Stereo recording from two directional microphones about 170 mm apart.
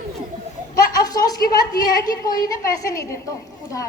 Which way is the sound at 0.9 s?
20° left (ahead or behind).